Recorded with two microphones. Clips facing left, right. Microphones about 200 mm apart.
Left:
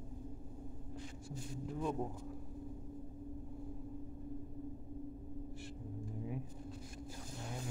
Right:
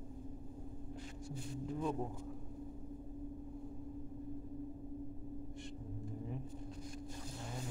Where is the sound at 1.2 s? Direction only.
Centre (ahead or behind).